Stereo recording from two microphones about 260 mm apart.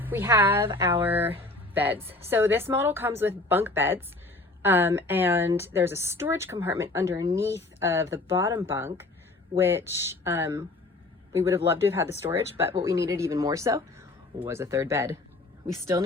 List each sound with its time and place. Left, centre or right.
0.0 s a woman's voice: centre